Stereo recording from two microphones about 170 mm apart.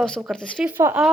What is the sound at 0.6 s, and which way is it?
Speech, 10° right (ahead or behind).